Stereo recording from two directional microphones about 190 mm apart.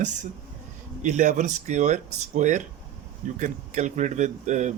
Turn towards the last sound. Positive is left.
turn(degrees=-40)  # may be behind; listen again after turning